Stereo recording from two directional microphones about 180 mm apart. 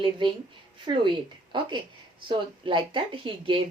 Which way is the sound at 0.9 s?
25° right (ahead or behind).